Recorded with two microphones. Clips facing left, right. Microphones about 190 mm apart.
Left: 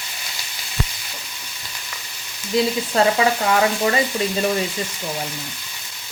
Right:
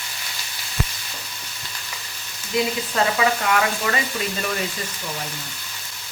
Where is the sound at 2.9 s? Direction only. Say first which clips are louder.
Left 4 dB; 30° left (ahead or behind).